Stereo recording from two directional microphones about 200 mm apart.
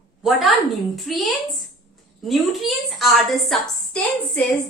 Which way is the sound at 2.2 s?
Centre (ahead or behind).